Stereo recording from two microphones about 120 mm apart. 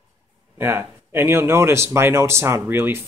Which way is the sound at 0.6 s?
20° right (ahead or behind).